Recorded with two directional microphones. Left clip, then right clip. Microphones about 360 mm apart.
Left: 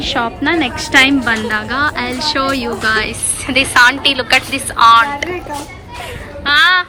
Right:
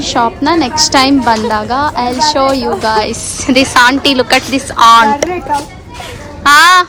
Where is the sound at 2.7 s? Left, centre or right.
Centre.